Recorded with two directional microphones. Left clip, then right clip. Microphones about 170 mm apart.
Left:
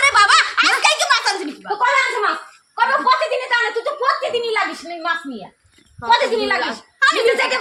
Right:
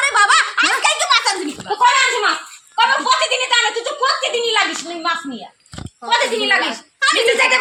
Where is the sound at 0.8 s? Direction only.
15° left (ahead or behind).